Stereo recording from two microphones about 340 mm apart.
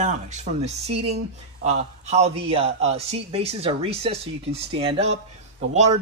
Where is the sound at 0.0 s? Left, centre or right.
Right.